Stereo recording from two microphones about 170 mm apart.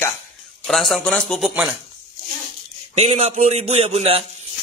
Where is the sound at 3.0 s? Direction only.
40° right (ahead or behind).